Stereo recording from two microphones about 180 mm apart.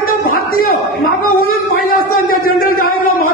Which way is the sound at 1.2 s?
50° left (ahead or behind).